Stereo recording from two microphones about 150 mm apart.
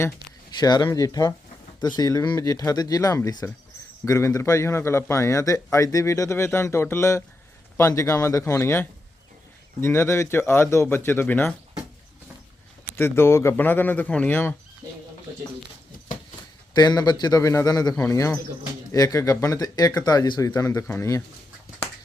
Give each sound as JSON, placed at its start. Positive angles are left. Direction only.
{"t": 0.6, "sound": "a man's voice", "side_deg": 25}
{"t": 13.0, "sound": "speech", "side_deg": 15}
{"t": 16.7, "sound": "a man's voice", "side_deg": 25}